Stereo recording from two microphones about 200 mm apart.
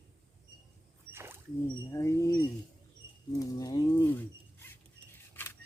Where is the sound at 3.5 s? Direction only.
20° left (ahead or behind).